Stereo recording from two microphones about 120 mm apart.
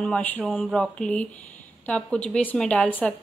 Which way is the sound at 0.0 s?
10° left (ahead or behind).